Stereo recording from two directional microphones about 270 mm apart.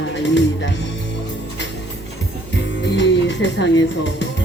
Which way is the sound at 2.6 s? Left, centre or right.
Left.